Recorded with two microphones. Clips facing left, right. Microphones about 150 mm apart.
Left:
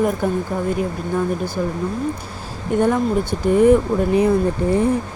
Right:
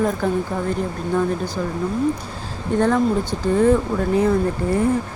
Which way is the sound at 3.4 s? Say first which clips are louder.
Left 4 dB; 15° left (ahead or behind).